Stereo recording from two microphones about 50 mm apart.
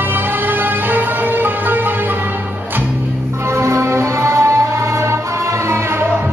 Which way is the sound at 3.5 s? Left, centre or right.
Right.